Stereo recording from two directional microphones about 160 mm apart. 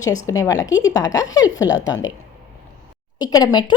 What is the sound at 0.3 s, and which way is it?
Speech, 20° left (ahead or behind).